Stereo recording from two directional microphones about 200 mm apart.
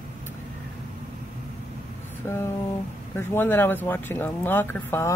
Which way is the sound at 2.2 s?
15° left (ahead or behind).